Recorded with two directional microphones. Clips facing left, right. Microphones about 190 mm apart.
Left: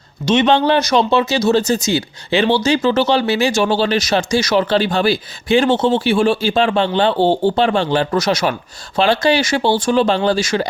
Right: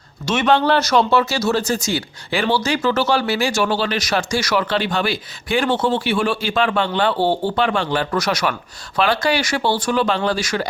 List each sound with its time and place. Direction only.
0.3 s speech: 20° left (ahead or behind)